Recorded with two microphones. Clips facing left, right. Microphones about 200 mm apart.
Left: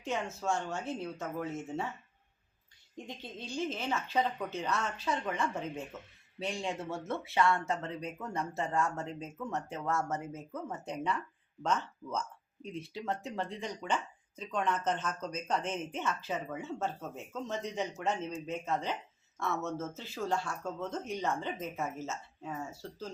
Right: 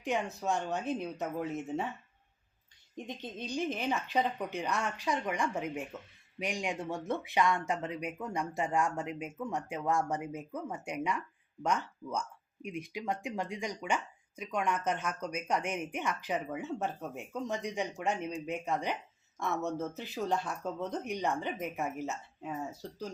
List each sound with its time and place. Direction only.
0.0 s speech: 15° right (ahead or behind)
2.9 s speech: 20° right (ahead or behind)